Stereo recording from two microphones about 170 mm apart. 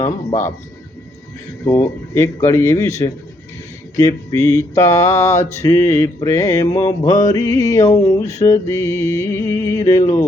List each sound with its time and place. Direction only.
0.0 s a man's voice: 40° left (ahead or behind)
1.6 s music: 15° left (ahead or behind)
5.6 s mantra: 15° left (ahead or behind)
8.3 s music: 20° left (ahead or behind)